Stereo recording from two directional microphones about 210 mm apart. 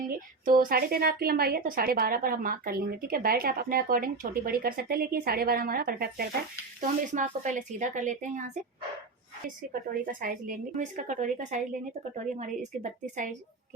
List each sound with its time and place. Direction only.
0.1 s a woman's voice: 40° right (ahead or behind)
10.1 s a woman's voice: 40° right (ahead or behind)